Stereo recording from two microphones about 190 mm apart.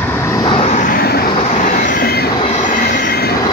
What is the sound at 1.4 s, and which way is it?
Train, 40° left (ahead or behind).